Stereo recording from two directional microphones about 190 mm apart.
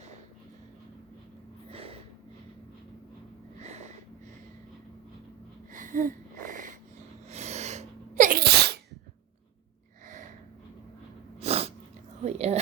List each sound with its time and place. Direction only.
1.7 s snort: 30° right (ahead or behind)
3.6 s snort: 35° right (ahead or behind)
5.7 s wheeze: 45° right (ahead or behind)
7.3 s sneeze: 35° right (ahead or behind); by 8.8 s 60° right (ahead or behind)
11.3 s sneeze: 30° right (ahead or behind)
12.2 s a sound: 35° right (ahead or behind)